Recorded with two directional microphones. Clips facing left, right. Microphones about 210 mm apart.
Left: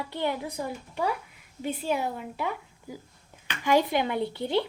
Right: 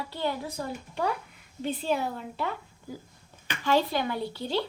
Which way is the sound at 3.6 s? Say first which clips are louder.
Left 2 dB; 15° left (ahead or behind).